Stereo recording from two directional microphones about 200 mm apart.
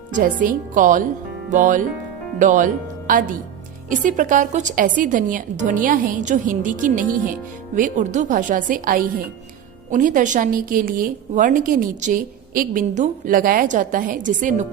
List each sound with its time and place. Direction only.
0.1 s a woman's voice: 40° right (ahead or behind)
3.8 s a woman's voice: 40° right (ahead or behind)